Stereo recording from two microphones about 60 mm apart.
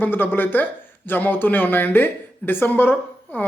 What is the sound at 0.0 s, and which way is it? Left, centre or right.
Speech, left.